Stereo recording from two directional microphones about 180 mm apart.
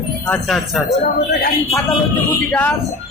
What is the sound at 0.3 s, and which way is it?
Speech, centre (ahead or behind).